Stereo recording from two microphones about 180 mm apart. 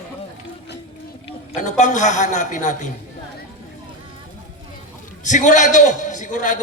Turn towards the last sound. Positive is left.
turn(degrees=45)  # may be behind; listen again after turning